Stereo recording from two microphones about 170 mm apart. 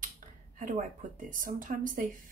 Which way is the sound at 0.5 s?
50° right (ahead or behind).